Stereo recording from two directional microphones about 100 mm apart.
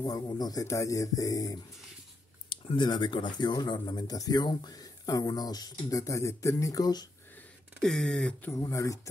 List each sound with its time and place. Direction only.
0.0 s speech: 45° left (ahead or behind)
2.5 s speech: 50° left (ahead or behind)
7.8 s speech: 5° left (ahead or behind)
8.5 s speech: 30° left (ahead or behind)